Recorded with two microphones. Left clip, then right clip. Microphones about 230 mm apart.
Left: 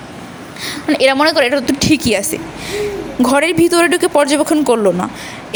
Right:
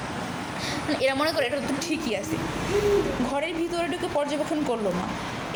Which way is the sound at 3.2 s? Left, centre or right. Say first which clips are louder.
Left 15 dB; left.